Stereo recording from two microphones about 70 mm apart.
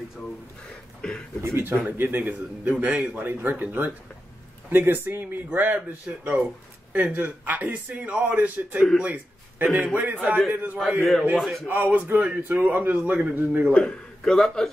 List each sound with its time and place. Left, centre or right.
1.0 s speech: centre
1.4 s a man's voice: right
9.0 s a sound: right
10.1 s a man's voice: right
11.3 s speech: centre
11.6 s a man's voice: right
13.7 s a man's voice: centre